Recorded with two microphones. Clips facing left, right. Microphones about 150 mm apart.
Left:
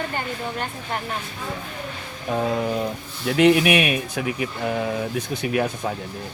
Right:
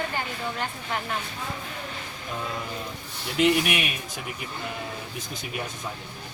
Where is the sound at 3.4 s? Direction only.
80° left.